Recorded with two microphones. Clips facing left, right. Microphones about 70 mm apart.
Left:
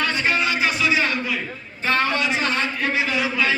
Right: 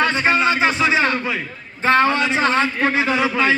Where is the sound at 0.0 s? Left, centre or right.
Right.